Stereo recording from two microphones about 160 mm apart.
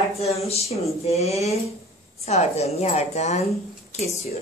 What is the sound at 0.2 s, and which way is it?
A woman's voice, 40° left (ahead or behind).